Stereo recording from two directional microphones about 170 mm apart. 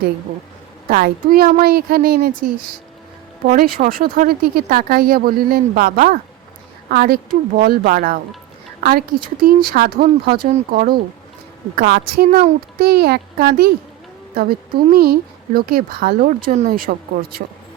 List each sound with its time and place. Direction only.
0.9 s speech: 60° right (ahead or behind)